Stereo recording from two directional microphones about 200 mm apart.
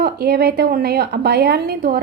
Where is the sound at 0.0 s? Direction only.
50° right (ahead or behind).